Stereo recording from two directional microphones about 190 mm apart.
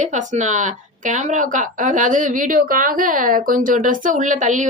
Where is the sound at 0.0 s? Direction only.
40° right (ahead or behind).